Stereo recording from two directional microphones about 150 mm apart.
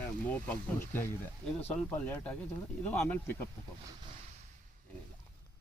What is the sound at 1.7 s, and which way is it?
Speech, 10° left (ahead or behind).